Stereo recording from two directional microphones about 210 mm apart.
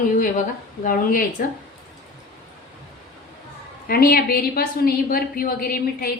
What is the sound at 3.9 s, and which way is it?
A woman's voice, 45° left (ahead or behind).